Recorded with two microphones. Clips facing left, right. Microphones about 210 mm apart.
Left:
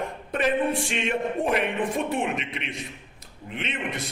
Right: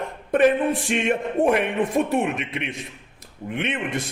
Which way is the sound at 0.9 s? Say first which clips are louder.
Right 4 dB; 50° right (ahead or behind).